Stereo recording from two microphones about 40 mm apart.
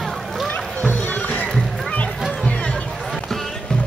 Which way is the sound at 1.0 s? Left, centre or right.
Left.